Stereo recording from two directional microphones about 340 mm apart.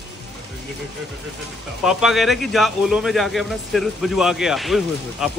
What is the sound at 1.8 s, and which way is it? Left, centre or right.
Speech, centre.